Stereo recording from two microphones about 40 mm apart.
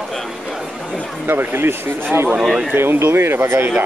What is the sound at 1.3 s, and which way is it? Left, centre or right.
Speech, right.